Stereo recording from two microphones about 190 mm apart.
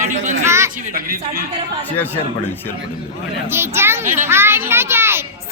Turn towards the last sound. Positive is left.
turn(degrees=-10)  # may be behind; listen again after turning